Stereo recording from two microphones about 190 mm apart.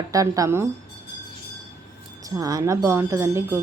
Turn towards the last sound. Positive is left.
turn(degrees=-15)  # may be behind; listen again after turning